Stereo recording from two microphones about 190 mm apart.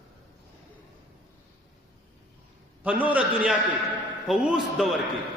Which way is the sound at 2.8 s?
10° right (ahead or behind).